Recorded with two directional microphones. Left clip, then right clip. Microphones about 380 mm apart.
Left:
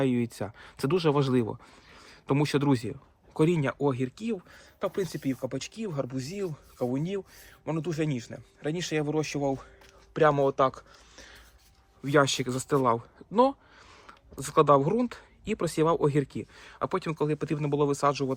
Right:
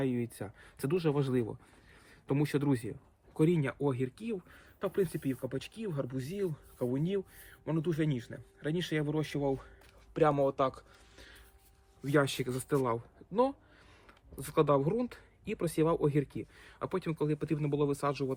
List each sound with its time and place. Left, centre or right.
0.0 s speech: centre